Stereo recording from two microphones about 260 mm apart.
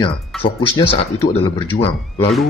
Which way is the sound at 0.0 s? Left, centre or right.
Centre.